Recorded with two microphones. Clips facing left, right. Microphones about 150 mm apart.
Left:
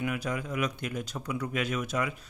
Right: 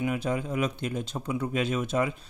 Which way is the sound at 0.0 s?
25° right (ahead or behind).